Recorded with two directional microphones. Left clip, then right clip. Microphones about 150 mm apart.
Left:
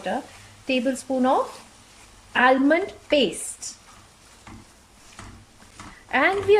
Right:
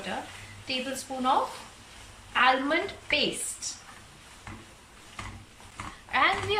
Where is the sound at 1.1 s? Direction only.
50° left (ahead or behind).